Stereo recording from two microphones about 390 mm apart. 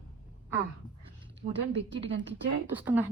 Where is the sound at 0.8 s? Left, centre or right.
Centre.